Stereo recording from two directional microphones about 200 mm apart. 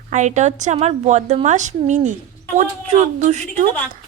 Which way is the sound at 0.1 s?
35° right (ahead or behind).